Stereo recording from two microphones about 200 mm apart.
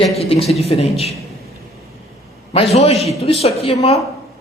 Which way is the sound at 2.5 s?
30° left (ahead or behind).